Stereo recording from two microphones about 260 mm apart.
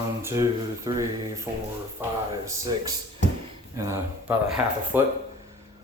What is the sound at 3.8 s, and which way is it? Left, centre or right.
Speech, centre.